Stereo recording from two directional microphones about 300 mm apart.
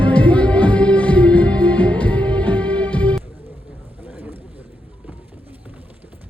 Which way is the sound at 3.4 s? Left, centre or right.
Centre.